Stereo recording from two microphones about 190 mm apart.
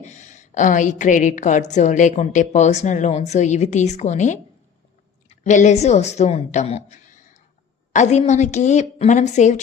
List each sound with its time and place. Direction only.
0.0 s a woman's voice: 40° left (ahead or behind)